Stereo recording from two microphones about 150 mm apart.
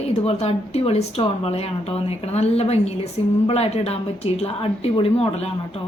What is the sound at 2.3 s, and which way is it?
A woman's voice, 45° left (ahead or behind).